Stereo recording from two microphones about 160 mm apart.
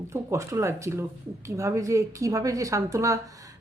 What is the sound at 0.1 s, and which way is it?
Speech, 20° right (ahead or behind).